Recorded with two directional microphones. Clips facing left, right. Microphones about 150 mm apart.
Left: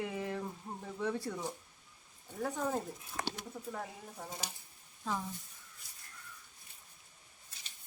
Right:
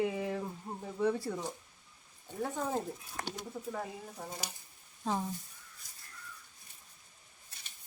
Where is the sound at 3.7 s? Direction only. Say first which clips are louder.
Right 3 dB; 5° right (ahead or behind).